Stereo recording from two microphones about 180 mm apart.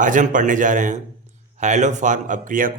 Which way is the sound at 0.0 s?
45° right (ahead or behind).